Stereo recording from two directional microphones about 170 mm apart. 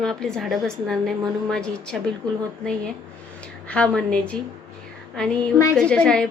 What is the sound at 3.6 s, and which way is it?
A child's voice, 5° left (ahead or behind).